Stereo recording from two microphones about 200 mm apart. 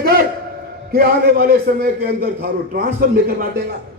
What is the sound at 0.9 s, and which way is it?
A man's voice, 50° right (ahead or behind).